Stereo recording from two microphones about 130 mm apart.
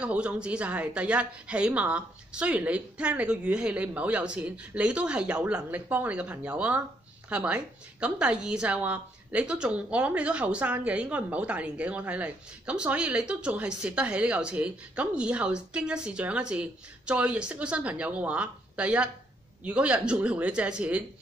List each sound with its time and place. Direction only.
0.0 s a woman's voice: 10° right (ahead or behind)